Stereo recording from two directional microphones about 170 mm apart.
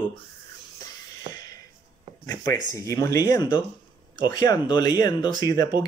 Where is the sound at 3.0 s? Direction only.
20° left (ahead or behind).